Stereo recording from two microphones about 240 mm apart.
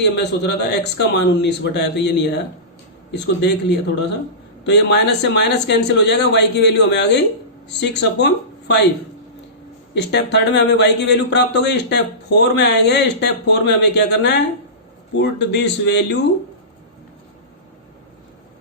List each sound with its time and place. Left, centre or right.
0.0 s speech: left
9.9 s speech: left